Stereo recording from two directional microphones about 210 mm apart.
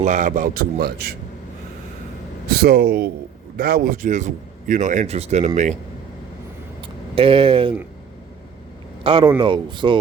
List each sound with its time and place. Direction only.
0.0 s a man's voice: 35° right (ahead or behind)
2.5 s a man's voice: 45° right (ahead or behind); by 5.5 s 30° right (ahead or behind)
6.8 s speech: 25° right (ahead or behind)
9.0 s speech: 25° right (ahead or behind)